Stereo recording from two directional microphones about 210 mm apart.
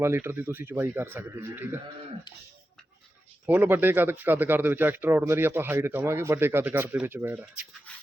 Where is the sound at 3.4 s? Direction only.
10° right (ahead or behind).